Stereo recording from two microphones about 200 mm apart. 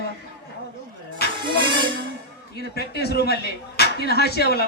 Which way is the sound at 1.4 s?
25° right (ahead or behind).